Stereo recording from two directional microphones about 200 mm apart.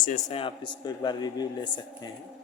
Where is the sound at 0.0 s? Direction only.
35° left (ahead or behind).